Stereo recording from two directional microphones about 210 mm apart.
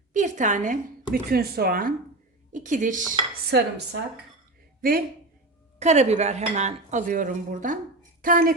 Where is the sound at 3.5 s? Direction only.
55° right (ahead or behind).